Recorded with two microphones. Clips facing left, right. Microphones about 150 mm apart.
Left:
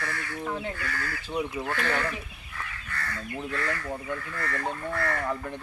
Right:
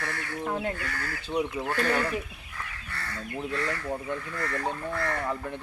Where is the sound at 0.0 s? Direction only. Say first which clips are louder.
Right 1 dB; 30° right (ahead or behind).